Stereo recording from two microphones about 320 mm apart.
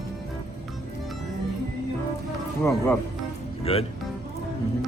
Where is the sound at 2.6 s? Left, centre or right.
Centre.